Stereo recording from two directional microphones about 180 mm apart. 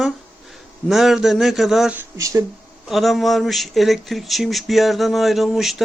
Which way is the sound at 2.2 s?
20° right (ahead or behind).